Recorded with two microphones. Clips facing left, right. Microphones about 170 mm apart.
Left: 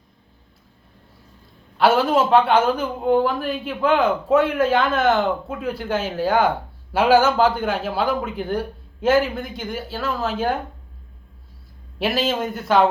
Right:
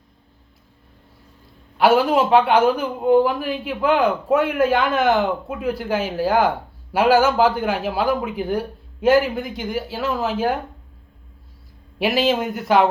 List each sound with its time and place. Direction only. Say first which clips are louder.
1.8 s a man's voice: right 1 dB; 15° right (ahead or behind)
11.9 s a man's voice: right 3 dB; 15° right (ahead or behind)